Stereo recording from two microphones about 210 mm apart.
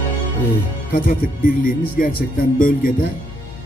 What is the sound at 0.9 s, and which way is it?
Speech, 40° left (ahead or behind).